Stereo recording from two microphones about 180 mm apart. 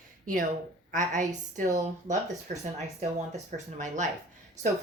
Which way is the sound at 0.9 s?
45° right (ahead or behind).